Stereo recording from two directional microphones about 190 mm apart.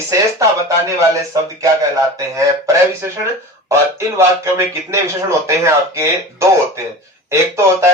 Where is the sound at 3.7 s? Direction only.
15° right (ahead or behind).